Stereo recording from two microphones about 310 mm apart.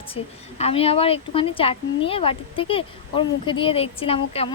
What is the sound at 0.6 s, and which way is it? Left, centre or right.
Speech, centre.